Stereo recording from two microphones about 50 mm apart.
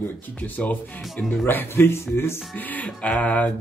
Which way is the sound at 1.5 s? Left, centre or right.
Left.